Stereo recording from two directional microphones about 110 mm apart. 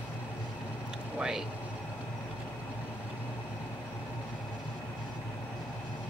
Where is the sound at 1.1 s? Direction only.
5° right (ahead or behind).